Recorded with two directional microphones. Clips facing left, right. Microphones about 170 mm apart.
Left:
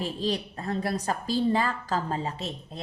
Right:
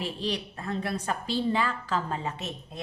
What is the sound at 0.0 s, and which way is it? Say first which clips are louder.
A woman's voice: left 3 dB; 40° left (ahead or behind).